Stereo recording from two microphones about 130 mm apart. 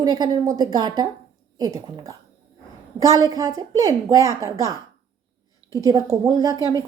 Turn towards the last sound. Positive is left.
turn(degrees=-30)  # may be behind; listen again after turning